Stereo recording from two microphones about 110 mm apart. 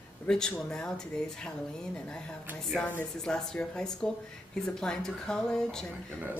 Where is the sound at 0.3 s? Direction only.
5° left (ahead or behind).